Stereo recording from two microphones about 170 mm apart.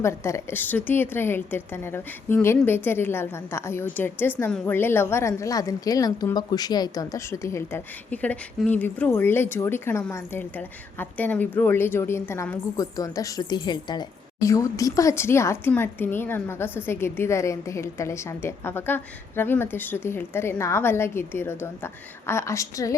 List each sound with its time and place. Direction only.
0.0 s a woman's voice: 15° left (ahead or behind)